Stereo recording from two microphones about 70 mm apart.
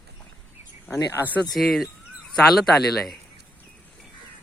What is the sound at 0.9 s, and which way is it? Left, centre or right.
Speech, left.